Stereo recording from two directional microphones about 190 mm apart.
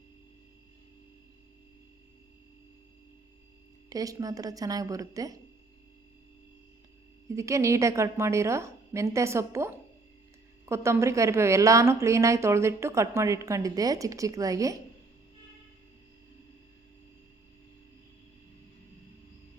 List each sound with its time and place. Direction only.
3.8 s speech: 20° right (ahead or behind)
7.3 s a woman's voice: 15° right (ahead or behind)